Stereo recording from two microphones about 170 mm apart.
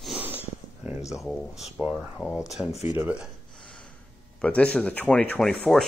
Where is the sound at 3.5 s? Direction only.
5° left (ahead or behind).